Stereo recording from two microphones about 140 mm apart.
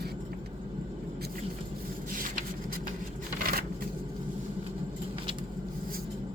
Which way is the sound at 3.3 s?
90° right.